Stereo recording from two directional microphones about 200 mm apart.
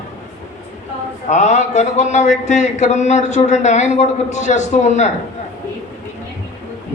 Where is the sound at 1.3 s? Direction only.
35° left (ahead or behind).